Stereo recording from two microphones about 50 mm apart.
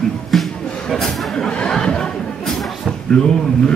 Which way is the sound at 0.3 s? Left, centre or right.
Centre.